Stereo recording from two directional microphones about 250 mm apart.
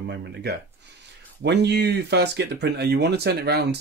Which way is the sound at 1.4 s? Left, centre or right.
Right.